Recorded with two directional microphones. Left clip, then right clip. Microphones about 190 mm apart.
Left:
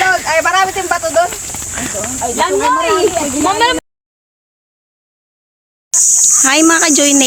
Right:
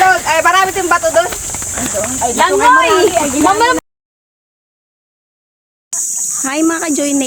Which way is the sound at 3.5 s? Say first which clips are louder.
Even; 50° right (ahead or behind).